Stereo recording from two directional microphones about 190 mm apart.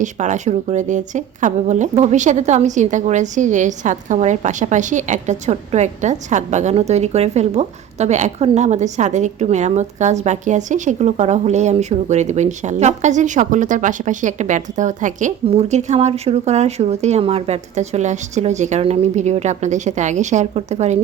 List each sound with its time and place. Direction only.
0.0 s a woman's voice: 40° right (ahead or behind)